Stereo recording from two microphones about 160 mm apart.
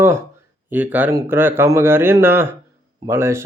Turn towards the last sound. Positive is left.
turn(degrees=-15)  # may be behind; listen again after turning